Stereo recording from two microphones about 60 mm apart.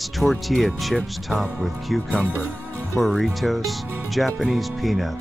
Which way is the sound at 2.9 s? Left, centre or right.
Centre.